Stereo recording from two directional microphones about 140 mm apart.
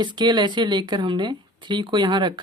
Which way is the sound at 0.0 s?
30° right (ahead or behind).